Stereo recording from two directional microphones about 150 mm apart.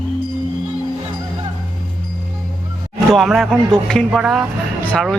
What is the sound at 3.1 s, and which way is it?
Speech, centre (ahead or behind).